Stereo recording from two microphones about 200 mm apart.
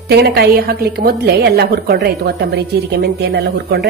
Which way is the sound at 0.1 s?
55° right (ahead or behind).